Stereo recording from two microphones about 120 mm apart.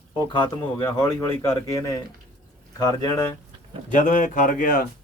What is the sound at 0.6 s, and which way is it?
Speech, 15° left (ahead or behind).